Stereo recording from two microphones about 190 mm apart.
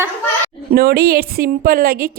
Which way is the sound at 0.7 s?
50° right (ahead or behind).